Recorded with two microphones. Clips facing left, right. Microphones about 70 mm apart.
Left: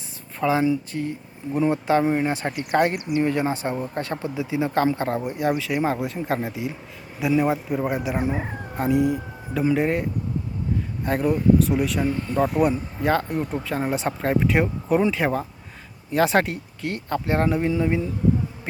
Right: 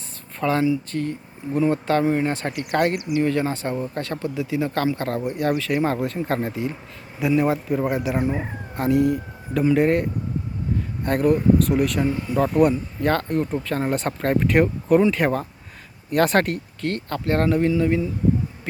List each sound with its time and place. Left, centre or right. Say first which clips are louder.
0.3 s speech: even; centre
1.5 s speech: even; centre
12.4 s speech: right 3 dB; centre